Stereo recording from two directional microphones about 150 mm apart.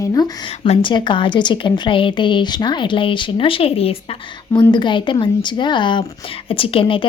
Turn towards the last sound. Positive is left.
turn(degrees=35)  # may be behind; listen again after turning